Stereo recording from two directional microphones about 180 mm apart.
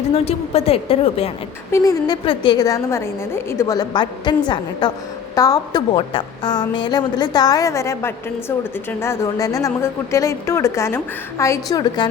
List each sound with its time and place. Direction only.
0.1 s a woman's voice: 35° left (ahead or behind)
1.7 s a woman's voice: 20° left (ahead or behind)